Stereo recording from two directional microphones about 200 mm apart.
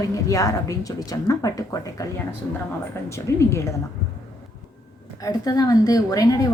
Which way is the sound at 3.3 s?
15° left (ahead or behind).